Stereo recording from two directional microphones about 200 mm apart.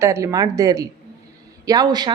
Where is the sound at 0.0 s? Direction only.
15° right (ahead or behind).